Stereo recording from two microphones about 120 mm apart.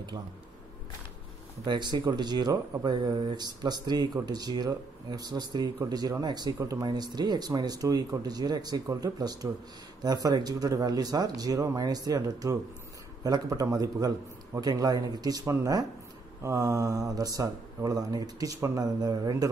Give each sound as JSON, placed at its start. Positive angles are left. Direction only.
{"t": 1.7, "sound": "speech", "side_deg": -40}
{"t": 15.4, "sound": "speech", "side_deg": -20}